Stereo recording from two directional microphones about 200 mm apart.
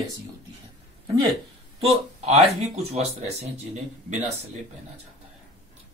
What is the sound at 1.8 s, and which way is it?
Speech, 30° right (ahead or behind).